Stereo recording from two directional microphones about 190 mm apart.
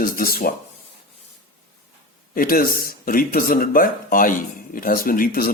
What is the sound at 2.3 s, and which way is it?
A man's voice, 50° left (ahead or behind).